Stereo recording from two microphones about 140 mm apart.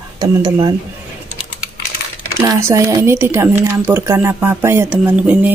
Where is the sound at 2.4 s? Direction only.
20° right (ahead or behind).